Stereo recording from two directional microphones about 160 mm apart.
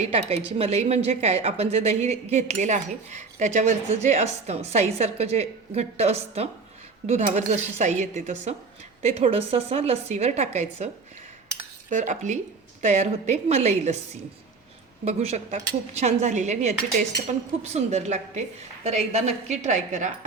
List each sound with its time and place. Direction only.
0.0 s a woman's voice: 40° right (ahead or behind)
11.9 s a woman's voice: 50° right (ahead or behind)
15.0 s a woman's voice: 40° right (ahead or behind)